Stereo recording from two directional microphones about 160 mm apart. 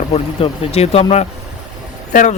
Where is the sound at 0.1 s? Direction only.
35° left (ahead or behind).